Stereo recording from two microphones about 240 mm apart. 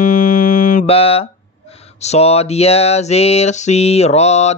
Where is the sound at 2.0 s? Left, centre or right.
Left.